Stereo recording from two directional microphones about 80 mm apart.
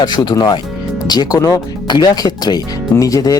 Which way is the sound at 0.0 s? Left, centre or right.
Left.